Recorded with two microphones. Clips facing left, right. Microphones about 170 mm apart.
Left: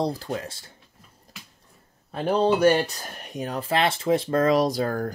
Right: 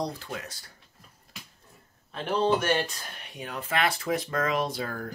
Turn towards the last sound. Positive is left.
turn(degrees=45)  # may be behind; listen again after turning